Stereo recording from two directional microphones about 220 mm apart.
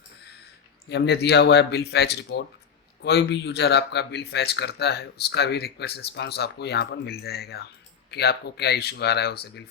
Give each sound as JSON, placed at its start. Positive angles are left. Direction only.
{"t": 0.9, "sound": "speech", "side_deg": 50}